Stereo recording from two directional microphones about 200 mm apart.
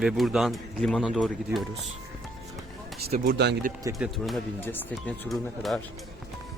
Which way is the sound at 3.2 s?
50° right (ahead or behind).